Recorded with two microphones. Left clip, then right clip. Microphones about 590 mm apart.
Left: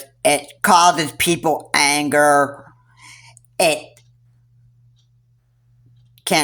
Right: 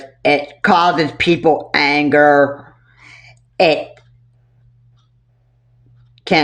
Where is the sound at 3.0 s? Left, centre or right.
Left.